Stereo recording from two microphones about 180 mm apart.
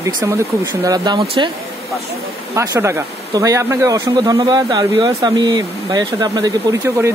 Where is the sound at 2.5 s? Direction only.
15° right (ahead or behind).